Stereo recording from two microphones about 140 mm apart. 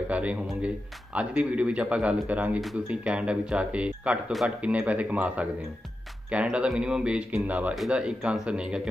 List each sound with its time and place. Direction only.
0.1 s speech: 10° right (ahead or behind)